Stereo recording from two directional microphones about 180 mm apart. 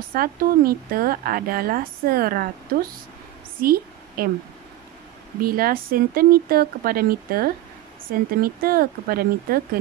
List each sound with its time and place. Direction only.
0.1 s speech: 55° right (ahead or behind)
3.5 s a sound: 55° right (ahead or behind)
5.4 s speech: 55° right (ahead or behind)